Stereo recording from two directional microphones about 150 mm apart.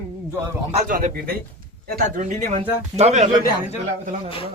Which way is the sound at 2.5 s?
45° right (ahead or behind).